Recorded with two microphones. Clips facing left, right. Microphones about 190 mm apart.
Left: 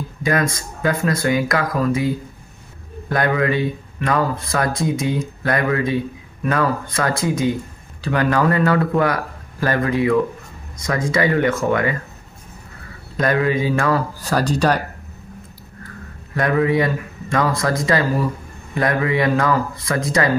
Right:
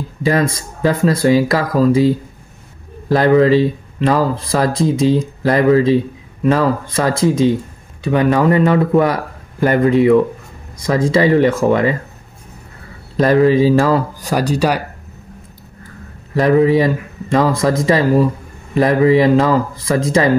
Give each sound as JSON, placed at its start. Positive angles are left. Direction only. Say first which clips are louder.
{"t": 0.2, "sound": "speech", "louder": "right 4 dB", "side_deg": -30}
{"t": 13.2, "sound": "speech", "louder": "right 8 dB", "side_deg": -30}
{"t": 14.2, "sound": "speech", "louder": "right 2 dB", "side_deg": -10}
{"t": 16.3, "sound": "speech", "louder": "right 6 dB", "side_deg": -25}